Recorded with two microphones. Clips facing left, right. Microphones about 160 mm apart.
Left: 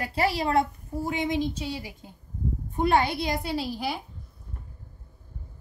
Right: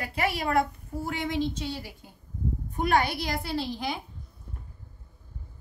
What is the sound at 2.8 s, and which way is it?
A woman's voice, 25° left (ahead or behind).